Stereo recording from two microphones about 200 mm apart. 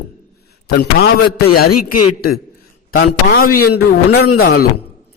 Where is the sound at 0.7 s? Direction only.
55° left (ahead or behind).